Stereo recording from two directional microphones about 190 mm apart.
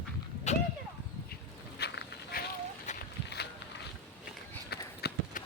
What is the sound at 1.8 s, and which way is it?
Insect, 55° left (ahead or behind).